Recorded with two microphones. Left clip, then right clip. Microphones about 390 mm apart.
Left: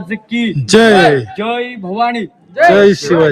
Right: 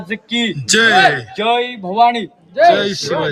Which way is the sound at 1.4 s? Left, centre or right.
Right.